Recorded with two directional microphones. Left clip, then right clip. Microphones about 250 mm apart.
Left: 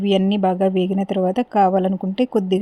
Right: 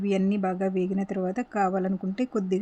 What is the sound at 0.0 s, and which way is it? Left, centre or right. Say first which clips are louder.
Speech: left 9 dB; centre.